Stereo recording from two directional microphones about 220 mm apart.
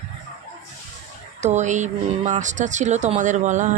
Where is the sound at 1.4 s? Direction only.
30° right (ahead or behind).